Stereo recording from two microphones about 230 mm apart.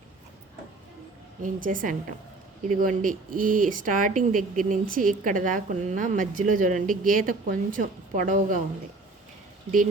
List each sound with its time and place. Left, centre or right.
1.4 s a woman's voice: right